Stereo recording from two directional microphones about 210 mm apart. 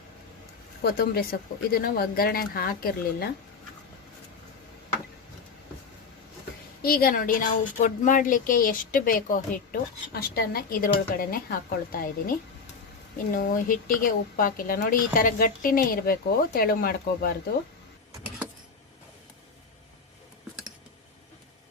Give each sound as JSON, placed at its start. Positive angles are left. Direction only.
{"t": 0.8, "sound": "speech", "side_deg": 45}
{"t": 6.8, "sound": "speech", "side_deg": 45}
{"t": 13.3, "sound": "speech", "side_deg": 40}